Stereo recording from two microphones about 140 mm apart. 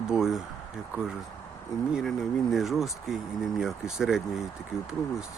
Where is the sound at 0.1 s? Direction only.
5° right (ahead or behind).